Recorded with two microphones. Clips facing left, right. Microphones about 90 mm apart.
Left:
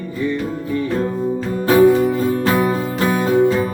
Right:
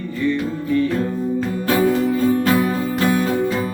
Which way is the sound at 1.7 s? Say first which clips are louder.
Left 6 dB; 30° left (ahead or behind).